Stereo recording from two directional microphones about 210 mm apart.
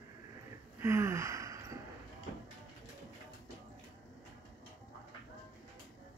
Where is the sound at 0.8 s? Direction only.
15° right (ahead or behind).